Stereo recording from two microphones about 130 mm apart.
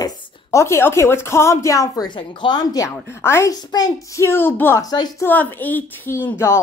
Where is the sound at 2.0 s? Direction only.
40° left (ahead or behind); by 4.8 s 15° left (ahead or behind).